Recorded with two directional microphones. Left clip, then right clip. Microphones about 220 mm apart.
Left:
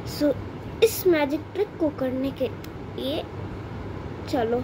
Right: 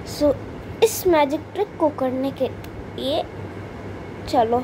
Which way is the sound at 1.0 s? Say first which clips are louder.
Right 4 dB; 5° left (ahead or behind).